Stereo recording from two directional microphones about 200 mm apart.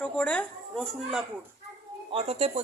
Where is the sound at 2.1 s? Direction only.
30° right (ahead or behind).